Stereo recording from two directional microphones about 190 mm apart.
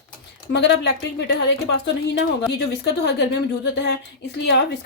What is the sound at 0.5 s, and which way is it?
Speech, 60° left (ahead or behind).